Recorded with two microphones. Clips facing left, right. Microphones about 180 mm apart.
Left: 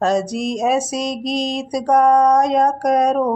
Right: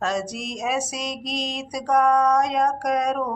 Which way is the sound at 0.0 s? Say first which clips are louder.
Left 8 dB; 35° left (ahead or behind).